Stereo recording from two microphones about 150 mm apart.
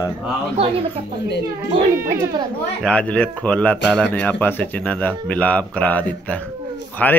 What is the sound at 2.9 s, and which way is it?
A man's voice, 10° left (ahead or behind).